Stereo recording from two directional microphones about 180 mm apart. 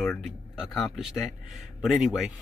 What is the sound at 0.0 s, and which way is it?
Speech, 5° left (ahead or behind).